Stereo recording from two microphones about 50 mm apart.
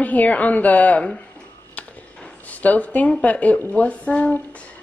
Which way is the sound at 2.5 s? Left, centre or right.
Left.